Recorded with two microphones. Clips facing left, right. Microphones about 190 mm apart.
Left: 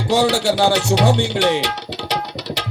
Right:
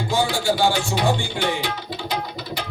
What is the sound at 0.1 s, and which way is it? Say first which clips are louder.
Speech: left 6 dB; 75° left (ahead or behind).